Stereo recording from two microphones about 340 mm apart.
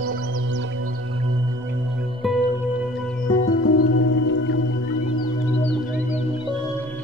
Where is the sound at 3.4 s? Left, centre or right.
Left.